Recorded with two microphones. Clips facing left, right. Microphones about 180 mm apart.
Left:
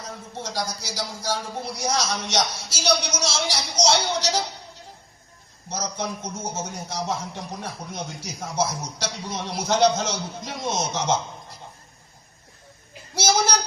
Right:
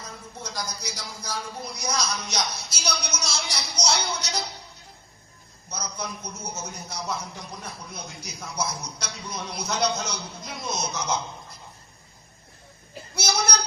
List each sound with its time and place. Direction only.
0.3 s a man's voice: 85° left
5.6 s a man's voice: 90° left
13.1 s child singing: 90° left